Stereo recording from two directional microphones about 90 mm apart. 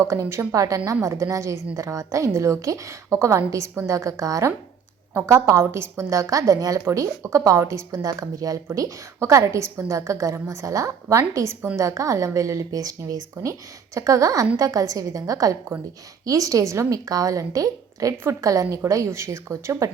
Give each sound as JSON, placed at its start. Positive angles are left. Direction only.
{"t": 0.0, "sound": "a woman's voice", "side_deg": -35}